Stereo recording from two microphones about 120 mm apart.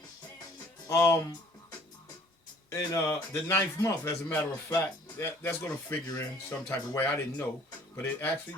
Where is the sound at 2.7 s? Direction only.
25° left (ahead or behind).